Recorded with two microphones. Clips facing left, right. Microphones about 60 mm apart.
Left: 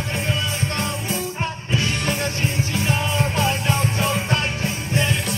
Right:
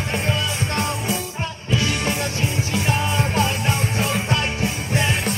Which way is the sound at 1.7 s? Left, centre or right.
Left.